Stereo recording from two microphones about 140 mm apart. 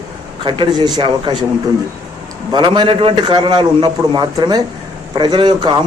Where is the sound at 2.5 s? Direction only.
35° right (ahead or behind).